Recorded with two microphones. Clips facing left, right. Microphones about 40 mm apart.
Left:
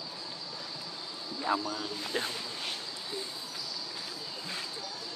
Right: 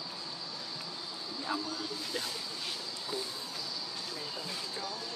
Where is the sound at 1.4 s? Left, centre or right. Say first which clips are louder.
Left 5 dB; left.